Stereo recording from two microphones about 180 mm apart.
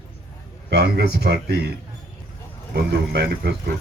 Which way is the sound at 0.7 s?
65° right (ahead or behind).